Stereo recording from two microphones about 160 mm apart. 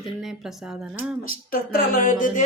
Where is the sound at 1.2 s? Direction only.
65° left (ahead or behind).